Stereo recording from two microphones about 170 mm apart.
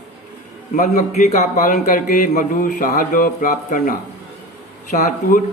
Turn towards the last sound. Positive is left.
turn(degrees=45)  # may be behind; listen again after turning